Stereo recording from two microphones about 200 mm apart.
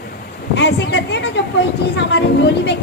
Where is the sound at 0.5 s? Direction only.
60° left (ahead or behind).